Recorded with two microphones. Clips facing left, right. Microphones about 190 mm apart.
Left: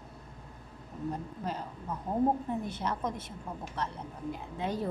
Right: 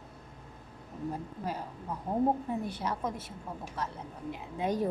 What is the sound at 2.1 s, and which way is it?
A woman's voice, 15° right (ahead or behind).